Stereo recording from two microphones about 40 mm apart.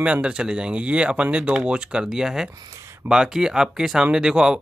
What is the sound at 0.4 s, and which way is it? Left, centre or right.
Speech, right.